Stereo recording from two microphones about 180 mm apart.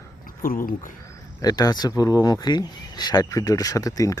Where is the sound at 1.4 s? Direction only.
20° left (ahead or behind).